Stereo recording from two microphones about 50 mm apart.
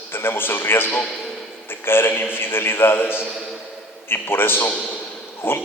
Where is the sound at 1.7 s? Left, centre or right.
Left.